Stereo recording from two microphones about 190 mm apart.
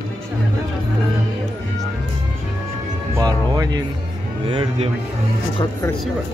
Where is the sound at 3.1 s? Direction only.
20° right (ahead or behind).